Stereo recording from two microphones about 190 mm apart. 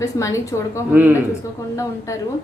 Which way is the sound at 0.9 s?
10° right (ahead or behind).